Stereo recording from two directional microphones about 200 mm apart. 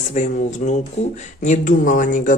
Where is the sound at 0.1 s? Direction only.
35° left (ahead or behind).